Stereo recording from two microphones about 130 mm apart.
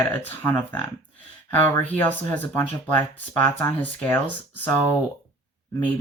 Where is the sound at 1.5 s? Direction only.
15° left (ahead or behind).